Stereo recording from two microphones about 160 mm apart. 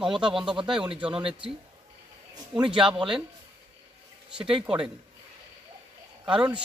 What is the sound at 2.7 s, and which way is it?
Speech, 5° right (ahead or behind).